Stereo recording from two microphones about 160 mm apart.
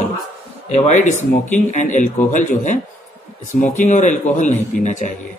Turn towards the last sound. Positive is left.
turn(degrees=50)  # may be behind; listen again after turning